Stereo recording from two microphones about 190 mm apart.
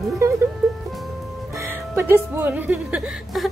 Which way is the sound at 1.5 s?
15° right (ahead or behind).